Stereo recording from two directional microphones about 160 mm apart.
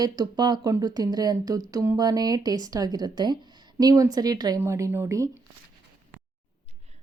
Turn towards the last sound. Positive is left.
turn(degrees=-20)  # may be behind; listen again after turning